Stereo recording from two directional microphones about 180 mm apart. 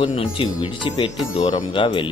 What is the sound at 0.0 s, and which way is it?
Speech, 30° left (ahead or behind).